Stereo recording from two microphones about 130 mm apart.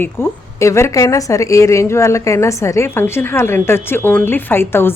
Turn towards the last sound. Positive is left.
turn(degrees=20)  # may be behind; listen again after turning